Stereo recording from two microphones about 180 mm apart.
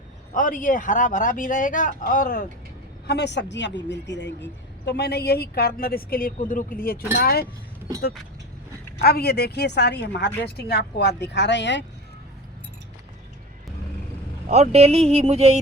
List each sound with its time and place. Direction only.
0.3 s speech: 50° left (ahead or behind)
3.1 s a woman's voice: 70° left (ahead or behind)
9.0 s a woman's voice: 60° left (ahead or behind); by 11.9 s 80° left
14.4 s speech: 40° right (ahead or behind)